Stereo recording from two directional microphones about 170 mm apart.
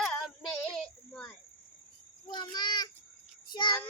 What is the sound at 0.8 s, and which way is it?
Child singing, 5° left (ahead or behind).